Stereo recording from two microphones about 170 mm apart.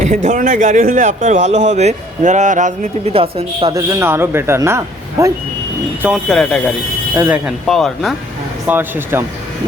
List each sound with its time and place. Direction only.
0.0 s speech: 45° right (ahead or behind)
3.1 s a woman's voice: 35° right (ahead or behind)
3.8 s a man's voice: 15° right (ahead or behind)
6.2 s speech: 5° left (ahead or behind)
7.2 s speech: 5° right (ahead or behind)
8.6 s a man's voice: 10° right (ahead or behind)